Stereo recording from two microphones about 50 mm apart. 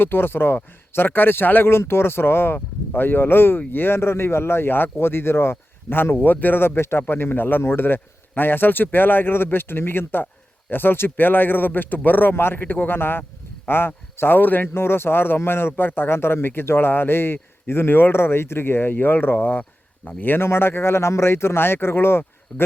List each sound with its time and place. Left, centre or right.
0.0 s speech: left
6.2 s speech: left
6.6 s speech: left
12.3 s speech: left
14.7 s speech: left
15.7 s speech: left
22.5 s speech: left